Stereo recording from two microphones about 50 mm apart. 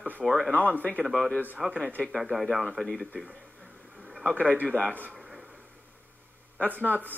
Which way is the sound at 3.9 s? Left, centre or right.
Centre.